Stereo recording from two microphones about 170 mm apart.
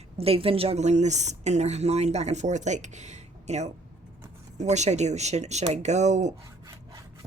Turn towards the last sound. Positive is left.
turn(degrees=-45)  # may be behind; listen again after turning